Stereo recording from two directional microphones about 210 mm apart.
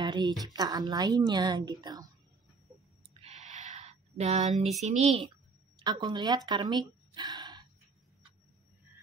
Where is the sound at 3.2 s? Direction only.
35° right (ahead or behind).